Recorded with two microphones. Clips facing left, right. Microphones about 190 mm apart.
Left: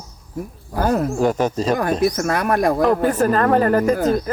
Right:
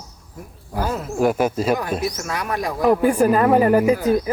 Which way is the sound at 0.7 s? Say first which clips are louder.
Left 6 dB; 50° left (ahead or behind).